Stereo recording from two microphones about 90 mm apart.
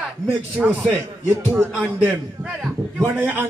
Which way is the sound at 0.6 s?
15° right (ahead or behind).